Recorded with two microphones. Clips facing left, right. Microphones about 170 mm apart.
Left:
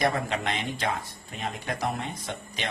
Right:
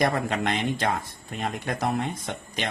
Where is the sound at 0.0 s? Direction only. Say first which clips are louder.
Right 2 dB; 50° right (ahead or behind).